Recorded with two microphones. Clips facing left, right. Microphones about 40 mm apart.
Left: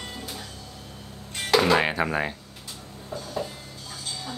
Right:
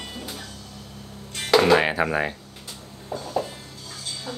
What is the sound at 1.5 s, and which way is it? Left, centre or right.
Speech, centre.